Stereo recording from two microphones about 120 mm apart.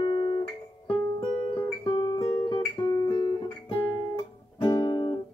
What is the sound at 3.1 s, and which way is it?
Music, 40° left (ahead or behind).